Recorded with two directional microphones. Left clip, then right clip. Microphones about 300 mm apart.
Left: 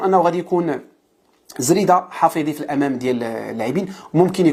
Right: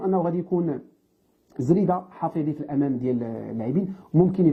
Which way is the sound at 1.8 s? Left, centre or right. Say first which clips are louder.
Left 11 dB; centre.